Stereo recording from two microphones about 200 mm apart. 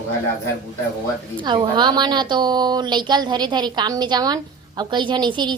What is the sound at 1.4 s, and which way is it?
A woman's voice, 25° right (ahead or behind).